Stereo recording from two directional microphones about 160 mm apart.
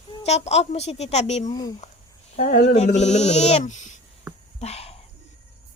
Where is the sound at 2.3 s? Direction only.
55° left (ahead or behind).